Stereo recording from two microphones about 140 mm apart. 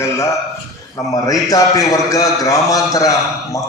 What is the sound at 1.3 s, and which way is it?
A man's voice, 25° left (ahead or behind).